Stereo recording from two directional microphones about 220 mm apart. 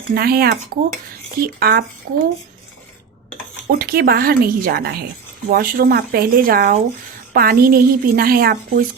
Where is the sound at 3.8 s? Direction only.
45° right (ahead or behind).